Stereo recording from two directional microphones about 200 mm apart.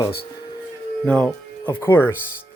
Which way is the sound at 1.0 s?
5° left (ahead or behind).